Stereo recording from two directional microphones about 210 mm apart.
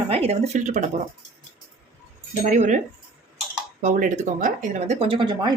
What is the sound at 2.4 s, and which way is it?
Speech, 35° right (ahead or behind).